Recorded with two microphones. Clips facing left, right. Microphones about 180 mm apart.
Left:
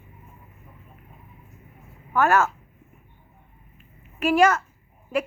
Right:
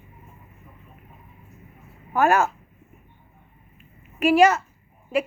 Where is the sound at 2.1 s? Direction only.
15° right (ahead or behind).